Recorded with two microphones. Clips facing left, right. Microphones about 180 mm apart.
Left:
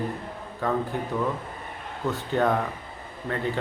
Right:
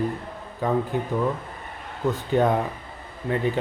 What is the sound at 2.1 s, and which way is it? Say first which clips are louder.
Speech: right 3 dB; 20° right (ahead or behind).